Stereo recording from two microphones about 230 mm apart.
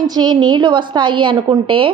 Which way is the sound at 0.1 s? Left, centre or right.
Centre.